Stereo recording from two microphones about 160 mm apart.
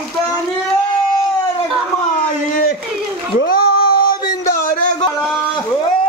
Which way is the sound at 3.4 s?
70° left (ahead or behind).